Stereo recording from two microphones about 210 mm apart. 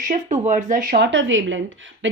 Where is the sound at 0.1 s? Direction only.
35° right (ahead or behind).